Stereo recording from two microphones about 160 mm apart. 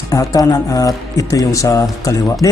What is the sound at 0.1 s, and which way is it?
A man's voice, 20° left (ahead or behind).